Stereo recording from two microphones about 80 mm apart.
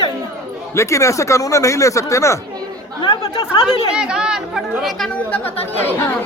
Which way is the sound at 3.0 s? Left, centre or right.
Left.